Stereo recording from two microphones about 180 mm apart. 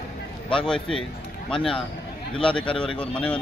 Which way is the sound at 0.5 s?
5° left (ahead or behind).